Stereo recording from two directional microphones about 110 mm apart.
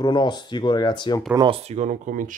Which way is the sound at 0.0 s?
45° left (ahead or behind).